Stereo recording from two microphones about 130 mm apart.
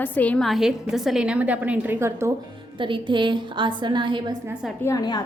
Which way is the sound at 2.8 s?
40° right (ahead or behind).